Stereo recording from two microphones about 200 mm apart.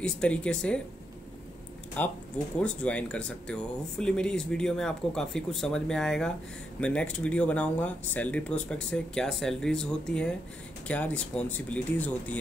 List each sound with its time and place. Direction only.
0.0 s speech: 5° left (ahead or behind)
2.0 s speech: 10° left (ahead or behind)